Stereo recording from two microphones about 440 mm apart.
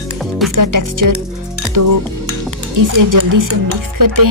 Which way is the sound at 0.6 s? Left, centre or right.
Right.